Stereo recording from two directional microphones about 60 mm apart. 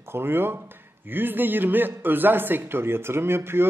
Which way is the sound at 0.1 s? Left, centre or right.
Right.